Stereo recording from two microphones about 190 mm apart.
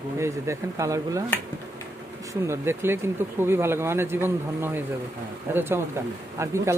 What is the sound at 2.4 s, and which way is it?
Speech, 15° right (ahead or behind).